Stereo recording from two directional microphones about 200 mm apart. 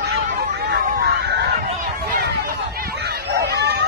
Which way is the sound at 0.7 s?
55° right (ahead or behind).